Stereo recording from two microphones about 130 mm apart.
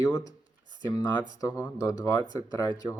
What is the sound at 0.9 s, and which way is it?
Speech, 25° left (ahead or behind).